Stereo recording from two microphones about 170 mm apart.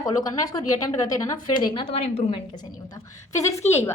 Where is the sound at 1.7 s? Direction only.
35° left (ahead or behind).